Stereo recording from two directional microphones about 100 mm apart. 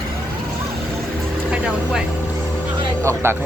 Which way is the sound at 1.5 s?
10° right (ahead or behind).